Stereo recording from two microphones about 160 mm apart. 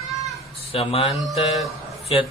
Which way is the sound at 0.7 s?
35° left (ahead or behind).